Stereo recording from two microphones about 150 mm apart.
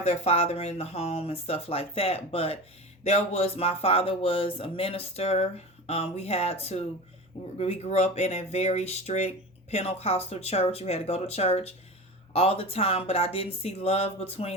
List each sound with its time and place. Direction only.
0.0 s speech: 45° left (ahead or behind)